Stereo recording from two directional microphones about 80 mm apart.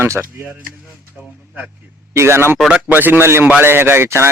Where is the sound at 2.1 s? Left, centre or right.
Right.